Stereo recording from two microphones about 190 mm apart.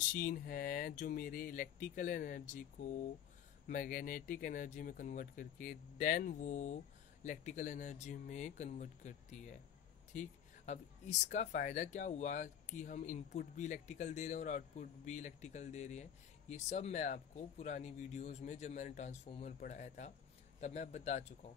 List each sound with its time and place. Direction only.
0.1 s speech: 50° left (ahead or behind)
3.6 s speech: 45° left (ahead or behind)